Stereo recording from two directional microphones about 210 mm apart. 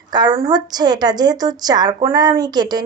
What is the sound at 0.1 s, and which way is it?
A woman's voice, 20° right (ahead or behind).